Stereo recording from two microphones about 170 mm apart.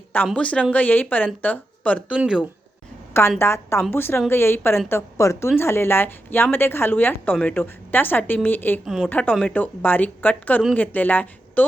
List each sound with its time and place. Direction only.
0.3 s a woman's voice: 5° left (ahead or behind)
2.1 s speech: 5° right (ahead or behind)
3.1 s a woman's voice: 15° left (ahead or behind)
8.8 s a woman's voice: 5° right (ahead or behind)
9.0 s a woman's voice: 10° left (ahead or behind)